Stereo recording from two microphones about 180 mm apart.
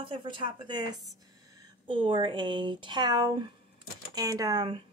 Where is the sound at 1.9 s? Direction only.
30° right (ahead or behind).